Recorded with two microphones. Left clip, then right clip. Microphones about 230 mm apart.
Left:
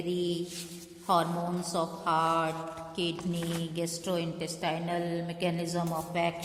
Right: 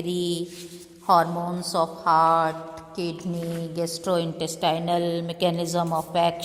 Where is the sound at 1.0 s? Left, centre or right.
Right.